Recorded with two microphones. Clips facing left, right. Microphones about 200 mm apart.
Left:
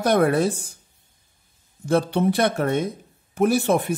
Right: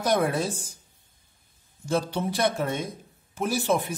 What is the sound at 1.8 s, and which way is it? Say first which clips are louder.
Speech: left 7 dB; 60° left (ahead or behind).